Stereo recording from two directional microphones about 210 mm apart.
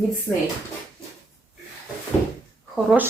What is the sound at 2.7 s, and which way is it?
Speech, centre (ahead or behind).